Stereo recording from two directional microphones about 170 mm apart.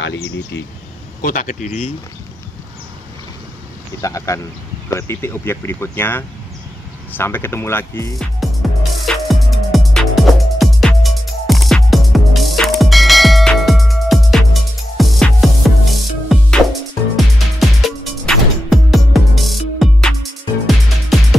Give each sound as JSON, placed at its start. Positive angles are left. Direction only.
{"t": 0.0, "sound": "speech", "side_deg": 90}
{"t": 1.2, "sound": "speech", "side_deg": 50}
{"t": 4.0, "sound": "a man's voice", "side_deg": 20}
{"t": 8.4, "sound": "music", "side_deg": 0}